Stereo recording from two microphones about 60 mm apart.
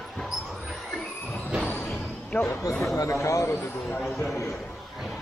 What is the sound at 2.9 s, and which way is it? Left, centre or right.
Speech, left.